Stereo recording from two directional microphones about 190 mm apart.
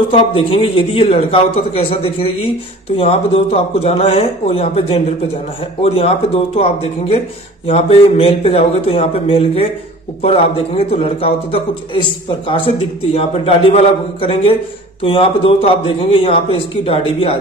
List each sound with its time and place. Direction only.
0.1 s speech: 30° left (ahead or behind)
10.9 s speech: 30° left (ahead or behind)